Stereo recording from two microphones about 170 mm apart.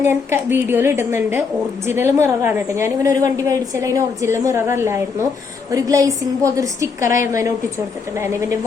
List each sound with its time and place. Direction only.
0.1 s a woman's voice: 15° right (ahead or behind)